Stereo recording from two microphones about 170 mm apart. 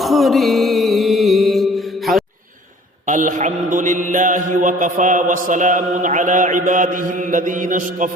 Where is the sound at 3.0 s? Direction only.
50° right (ahead or behind).